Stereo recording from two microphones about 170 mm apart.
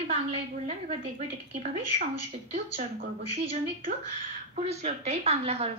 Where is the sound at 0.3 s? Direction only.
40° right (ahead or behind).